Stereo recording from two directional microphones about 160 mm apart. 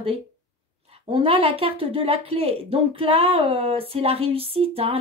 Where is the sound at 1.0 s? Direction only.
35° right (ahead or behind).